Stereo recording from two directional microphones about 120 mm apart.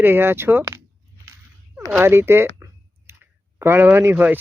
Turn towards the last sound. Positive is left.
turn(degrees=-15)  # may be behind; listen again after turning